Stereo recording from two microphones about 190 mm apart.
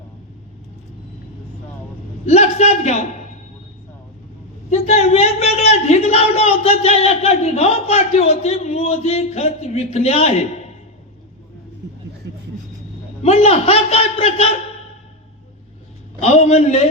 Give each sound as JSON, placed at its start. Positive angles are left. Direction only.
{"t": 2.2, "sound": "a man's voice", "side_deg": 35}
{"t": 4.7, "sound": "a man's voice", "side_deg": 35}
{"t": 12.2, "sound": "vehicle", "side_deg": -65}
{"t": 13.2, "sound": "a man's voice", "side_deg": 35}
{"t": 16.2, "sound": "a man's voice", "side_deg": 35}